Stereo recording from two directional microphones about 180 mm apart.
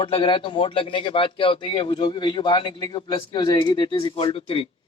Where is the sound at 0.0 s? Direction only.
30° left (ahead or behind).